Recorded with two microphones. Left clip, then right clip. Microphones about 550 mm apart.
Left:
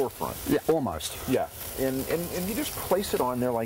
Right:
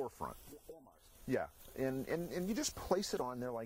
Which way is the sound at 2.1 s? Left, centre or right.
Right.